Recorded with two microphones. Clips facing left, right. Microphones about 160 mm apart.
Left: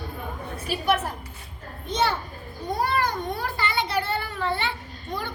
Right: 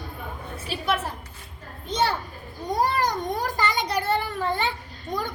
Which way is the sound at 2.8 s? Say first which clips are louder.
Right 2 dB; 40° right (ahead or behind).